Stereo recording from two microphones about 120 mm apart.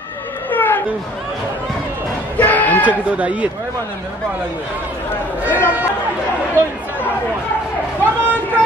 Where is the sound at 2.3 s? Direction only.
15° left (ahead or behind).